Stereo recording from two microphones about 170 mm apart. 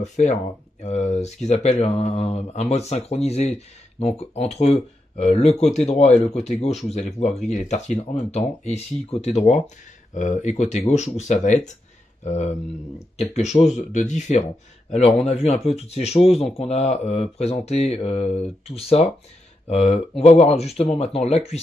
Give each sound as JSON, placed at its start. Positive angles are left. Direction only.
{"t": 0.0, "sound": "speech", "side_deg": 45}